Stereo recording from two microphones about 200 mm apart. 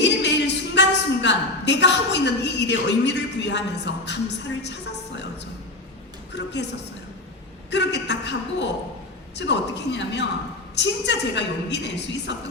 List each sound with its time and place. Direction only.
0.0 s a sound: 60° left (ahead or behind)
4.6 s a woman's voice: 60° left (ahead or behind)
6.3 s a woman's voice: 60° left (ahead or behind)
7.7 s a woman's voice: 60° left (ahead or behind)